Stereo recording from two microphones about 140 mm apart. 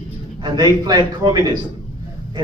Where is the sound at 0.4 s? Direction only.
30° right (ahead or behind).